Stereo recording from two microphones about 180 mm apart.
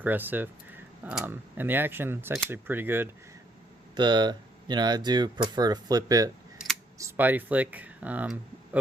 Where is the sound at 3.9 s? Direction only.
25° right (ahead or behind).